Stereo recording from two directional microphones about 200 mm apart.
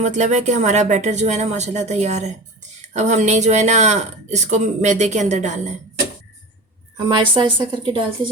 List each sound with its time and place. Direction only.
0.0 s speech: 35° right (ahead or behind)
6.9 s a woman's voice: 25° right (ahead or behind)